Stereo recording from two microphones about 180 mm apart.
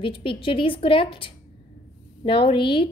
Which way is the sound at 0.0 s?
30° left (ahead or behind).